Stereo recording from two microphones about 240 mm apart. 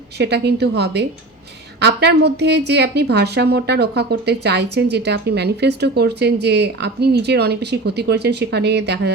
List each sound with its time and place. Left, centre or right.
0.2 s a woman's voice: right